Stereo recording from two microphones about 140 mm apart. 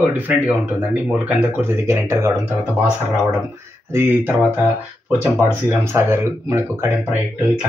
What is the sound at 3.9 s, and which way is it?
Speech, 15° right (ahead or behind).